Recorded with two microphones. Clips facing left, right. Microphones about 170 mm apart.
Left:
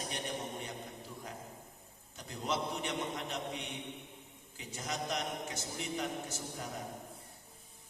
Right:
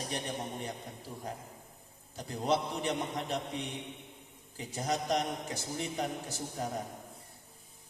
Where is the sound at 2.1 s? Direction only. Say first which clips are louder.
Right 6 dB; 35° right (ahead or behind).